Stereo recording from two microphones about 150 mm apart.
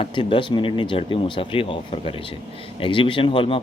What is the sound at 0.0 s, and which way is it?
A man's voice, 35° left (ahead or behind).